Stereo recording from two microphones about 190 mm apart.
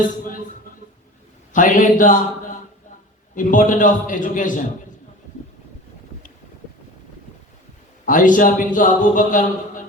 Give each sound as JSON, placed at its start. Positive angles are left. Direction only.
{"t": 1.5, "sound": "a man's voice", "side_deg": 45}
{"t": 3.3, "sound": "a man's voice", "side_deg": 45}
{"t": 8.0, "sound": "a man's voice", "side_deg": 45}